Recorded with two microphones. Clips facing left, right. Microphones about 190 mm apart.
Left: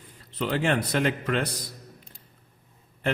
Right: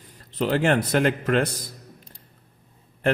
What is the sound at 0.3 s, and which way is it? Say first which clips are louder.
Speech: right 4 dB; 45° right (ahead or behind).